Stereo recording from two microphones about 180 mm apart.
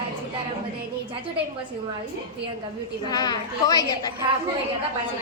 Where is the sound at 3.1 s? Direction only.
20° left (ahead or behind).